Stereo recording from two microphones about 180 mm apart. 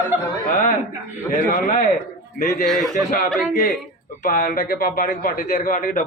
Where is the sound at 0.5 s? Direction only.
50° left (ahead or behind).